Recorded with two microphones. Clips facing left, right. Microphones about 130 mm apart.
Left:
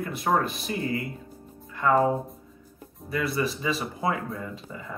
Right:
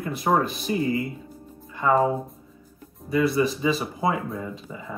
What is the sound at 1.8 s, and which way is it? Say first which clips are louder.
Speech: right 1 dB; 10° right (ahead or behind).